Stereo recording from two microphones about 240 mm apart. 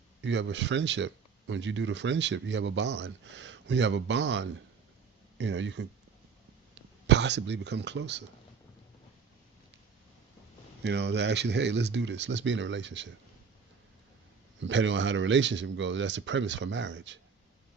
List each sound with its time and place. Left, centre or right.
0.2 s speech: right
10.8 s speech: right
14.6 s speech: right